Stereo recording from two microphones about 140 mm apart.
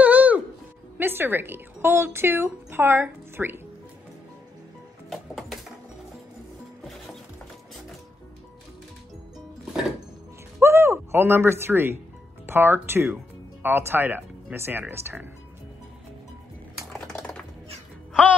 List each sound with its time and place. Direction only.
0.0 s music: 10° right (ahead or behind)
0.9 s speech: 15° right (ahead or behind)
5.1 s music: centre (ahead or behind)
10.6 s a sound: 20° right (ahead or behind)
12.4 s speech: 15° right (ahead or behind)
17.1 s a sound: 10° left (ahead or behind)